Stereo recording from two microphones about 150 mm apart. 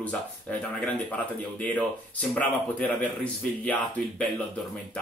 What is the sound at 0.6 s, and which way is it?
Speech, 10° left (ahead or behind).